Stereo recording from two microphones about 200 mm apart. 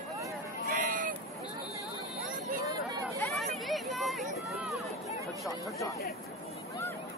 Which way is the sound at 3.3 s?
Centre (ahead or behind).